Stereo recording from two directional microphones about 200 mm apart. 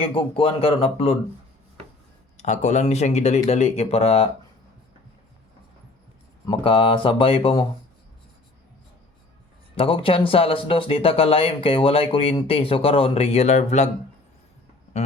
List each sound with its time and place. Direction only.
0.0 s speech: 25° left (ahead or behind)
2.4 s speech: 35° left (ahead or behind)
6.5 s speech: 25° left (ahead or behind)
9.7 s speech: 25° left (ahead or behind)
14.9 s speech: 35° left (ahead or behind)